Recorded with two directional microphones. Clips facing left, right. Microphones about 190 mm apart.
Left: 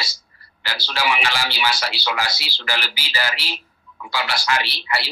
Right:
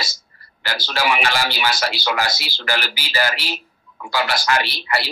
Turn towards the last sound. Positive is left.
turn(degrees=-45)  # may be behind; listen again after turning